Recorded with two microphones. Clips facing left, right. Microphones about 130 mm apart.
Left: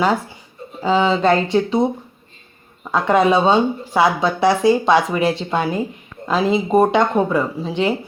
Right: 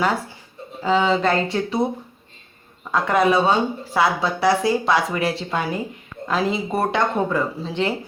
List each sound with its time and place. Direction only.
0.8 s a woman's voice: 20° left (ahead or behind)
2.9 s a woman's voice: 20° left (ahead or behind)